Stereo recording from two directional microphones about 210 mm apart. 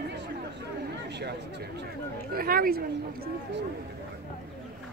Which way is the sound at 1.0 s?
55° right (ahead or behind).